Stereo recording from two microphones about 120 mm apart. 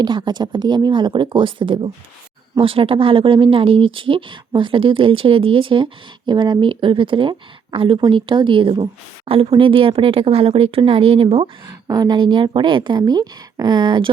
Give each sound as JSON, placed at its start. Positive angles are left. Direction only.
{"t": 0.0, "sound": "a woman's voice", "side_deg": -40}
{"t": 11.9, "sound": "a woman's voice", "side_deg": -35}